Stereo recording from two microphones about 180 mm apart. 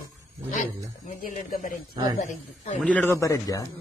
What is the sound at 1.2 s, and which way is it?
Speech, 45° left (ahead or behind).